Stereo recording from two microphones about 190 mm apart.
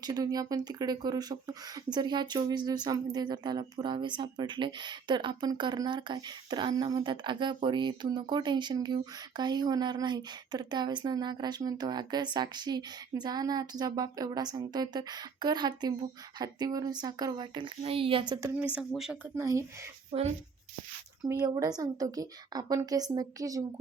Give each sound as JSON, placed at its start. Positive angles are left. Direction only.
{"t": 0.0, "sound": "speech", "side_deg": -20}
{"t": 18.7, "sound": "speech", "side_deg": -5}
{"t": 19.4, "sound": "speech", "side_deg": -15}
{"t": 20.1, "sound": "speech", "side_deg": -35}
{"t": 21.2, "sound": "speech", "side_deg": -20}